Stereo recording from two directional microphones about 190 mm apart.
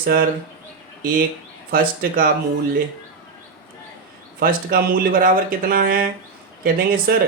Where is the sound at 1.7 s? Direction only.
50° right (ahead or behind).